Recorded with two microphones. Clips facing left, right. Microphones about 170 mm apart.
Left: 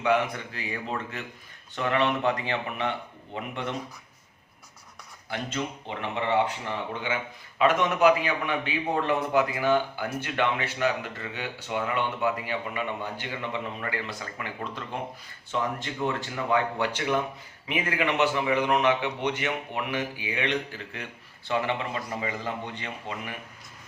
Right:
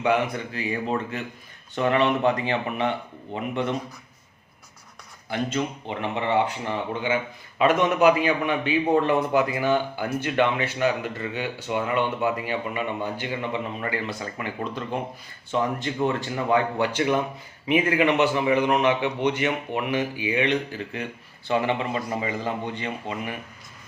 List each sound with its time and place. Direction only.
0.0 s a man's voice: 20° right (ahead or behind)
5.3 s a man's voice: 15° right (ahead or behind)